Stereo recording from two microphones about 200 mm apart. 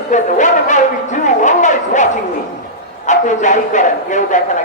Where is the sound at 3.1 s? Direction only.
40° left (ahead or behind).